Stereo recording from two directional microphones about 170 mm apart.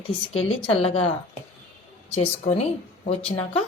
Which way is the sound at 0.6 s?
35° left (ahead or behind).